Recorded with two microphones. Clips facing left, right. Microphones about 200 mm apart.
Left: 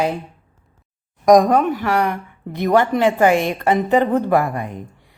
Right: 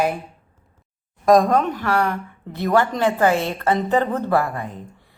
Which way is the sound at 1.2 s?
15° left (ahead or behind).